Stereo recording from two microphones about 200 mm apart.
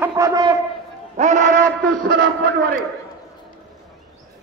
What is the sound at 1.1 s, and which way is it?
Speech, 35° right (ahead or behind).